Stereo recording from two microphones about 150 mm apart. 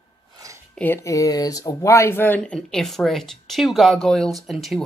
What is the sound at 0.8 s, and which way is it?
Speech, 15° left (ahead or behind).